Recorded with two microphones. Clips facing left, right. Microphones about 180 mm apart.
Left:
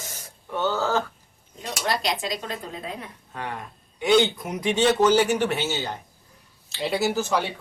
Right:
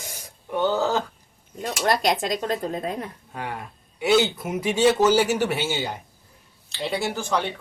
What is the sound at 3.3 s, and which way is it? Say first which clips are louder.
Speech: even; 10° right (ahead or behind).